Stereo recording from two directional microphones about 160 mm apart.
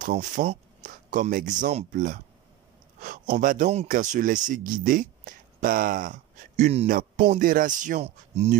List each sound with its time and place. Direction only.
0.0 s speech: 55° right (ahead or behind)
6.9 s music: 60° right (ahead or behind)
7.3 s speech: 60° right (ahead or behind)